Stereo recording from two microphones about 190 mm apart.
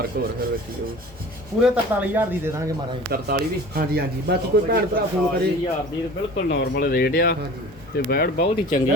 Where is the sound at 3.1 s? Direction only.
55° right (ahead or behind).